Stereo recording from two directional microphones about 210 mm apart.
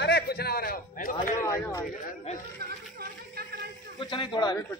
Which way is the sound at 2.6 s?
50° right (ahead or behind).